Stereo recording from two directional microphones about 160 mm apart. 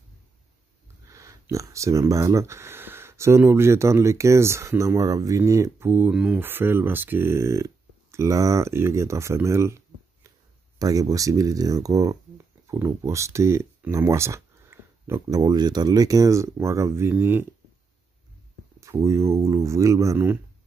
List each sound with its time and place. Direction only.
1.1 s speech: 20° right (ahead or behind)
10.8 s speech: 20° right (ahead or behind)
18.8 s speech: 20° right (ahead or behind)